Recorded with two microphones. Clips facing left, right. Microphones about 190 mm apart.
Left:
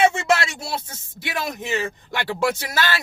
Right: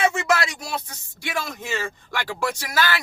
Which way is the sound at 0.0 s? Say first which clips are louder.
Left 3 dB; 25° left (ahead or behind).